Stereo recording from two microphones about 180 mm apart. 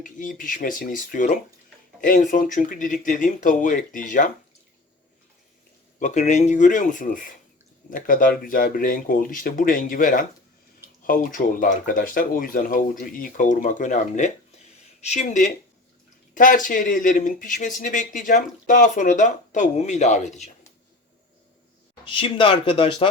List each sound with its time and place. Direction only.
0.0 s speech: 50° left (ahead or behind)
6.0 s speech: 40° left (ahead or behind)
22.0 s speech: 30° left (ahead or behind)